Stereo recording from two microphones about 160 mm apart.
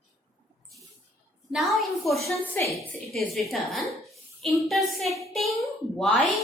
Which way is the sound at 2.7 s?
Centre (ahead or behind).